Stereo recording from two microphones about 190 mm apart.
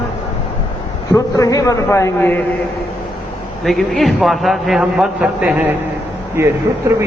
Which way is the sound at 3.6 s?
Centre (ahead or behind).